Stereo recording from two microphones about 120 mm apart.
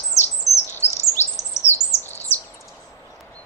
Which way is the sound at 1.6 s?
25° left (ahead or behind).